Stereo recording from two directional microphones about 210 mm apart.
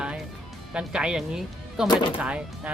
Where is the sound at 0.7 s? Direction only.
5° right (ahead or behind).